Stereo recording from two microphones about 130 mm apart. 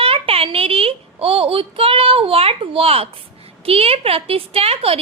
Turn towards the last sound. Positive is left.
turn(degrees=-50)  # may be behind; listen again after turning